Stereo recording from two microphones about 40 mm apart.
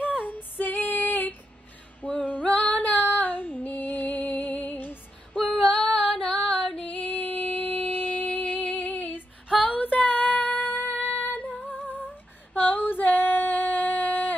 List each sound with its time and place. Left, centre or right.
0.0 s female singing: left
2.0 s female singing: left
5.8 s female singing: left
7.8 s music: left
9.7 s female singing: left